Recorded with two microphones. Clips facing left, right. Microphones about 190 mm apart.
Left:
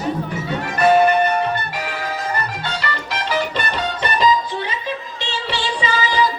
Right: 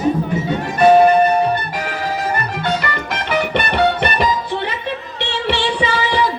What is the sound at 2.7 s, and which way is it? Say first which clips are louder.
Music: right 5 dB; 55° right (ahead or behind).